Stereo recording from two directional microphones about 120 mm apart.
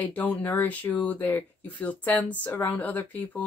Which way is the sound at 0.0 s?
15° left (ahead or behind).